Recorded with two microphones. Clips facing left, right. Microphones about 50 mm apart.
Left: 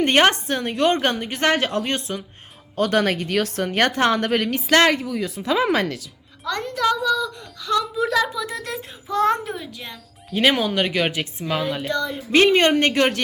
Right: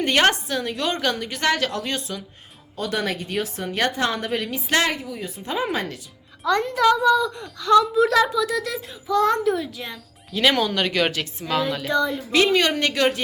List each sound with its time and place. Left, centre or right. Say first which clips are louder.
0.0 s a woman's voice: left 2 dB; left
2.7 s a woman's voice: left 6 dB; left
4.9 s speech: left 6 dB; left
6.4 s a woman's voice: right 4 dB; centre
7.6 s speech: right 6 dB; centre
8.4 s a woman's voice: right 4 dB; left
9.6 s speech: right 4 dB; centre
10.3 s speech: left 1 dB; centre
11.9 s speech: right 5 dB; centre
12.3 s a woman's voice: left 4 dB; left